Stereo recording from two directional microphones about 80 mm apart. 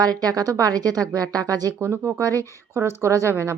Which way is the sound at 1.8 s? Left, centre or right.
Right.